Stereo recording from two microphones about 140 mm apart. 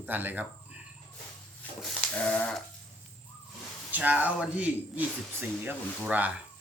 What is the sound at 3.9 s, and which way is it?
Speech, 10° right (ahead or behind).